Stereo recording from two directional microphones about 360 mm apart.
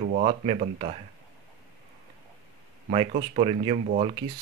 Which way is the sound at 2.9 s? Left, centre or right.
Centre.